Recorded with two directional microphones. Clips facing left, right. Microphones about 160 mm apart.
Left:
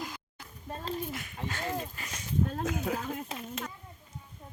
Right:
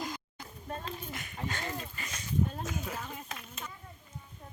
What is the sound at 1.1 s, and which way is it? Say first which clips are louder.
Speech: left 1 dB; centre (ahead or behind).